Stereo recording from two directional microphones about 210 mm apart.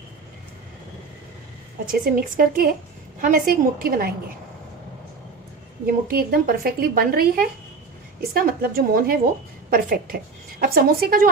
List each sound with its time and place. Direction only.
1.9 s a woman's voice: 45° right (ahead or behind)
5.9 s a woman's voice: 45° right (ahead or behind)